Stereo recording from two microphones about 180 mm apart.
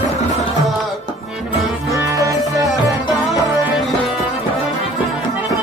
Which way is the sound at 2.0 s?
20° right (ahead or behind).